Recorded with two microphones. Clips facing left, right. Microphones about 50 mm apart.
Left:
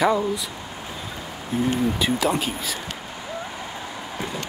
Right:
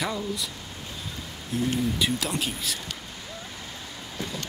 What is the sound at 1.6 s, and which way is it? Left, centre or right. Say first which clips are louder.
Speech: left 4 dB; left.